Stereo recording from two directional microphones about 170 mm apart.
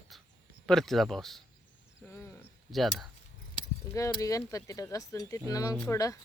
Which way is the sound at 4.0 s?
20° left (ahead or behind).